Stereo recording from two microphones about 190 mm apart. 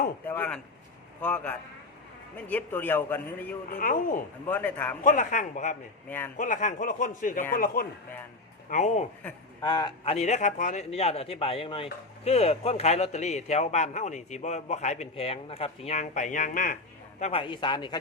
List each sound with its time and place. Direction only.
0.3 s speech: 10° left (ahead or behind)
3.7 s speech: 45° left (ahead or behind)
4.4 s speech: 10° left (ahead or behind)
5.0 s a man's voice: 40° left (ahead or behind)
6.1 s speech: 10° left (ahead or behind)
6.3 s speech: 40° left (ahead or behind)
8.7 s a man's voice: 35° left (ahead or behind)
9.6 s a man's voice: 25° left (ahead or behind)
17.4 s a man's voice: 25° left (ahead or behind)